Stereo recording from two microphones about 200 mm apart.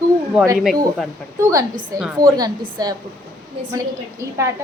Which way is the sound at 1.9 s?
15° right (ahead or behind).